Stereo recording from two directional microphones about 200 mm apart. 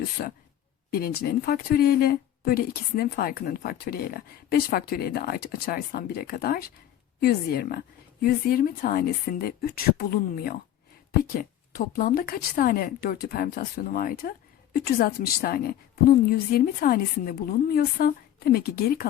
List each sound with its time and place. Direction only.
0.2 s speech: 50° left (ahead or behind)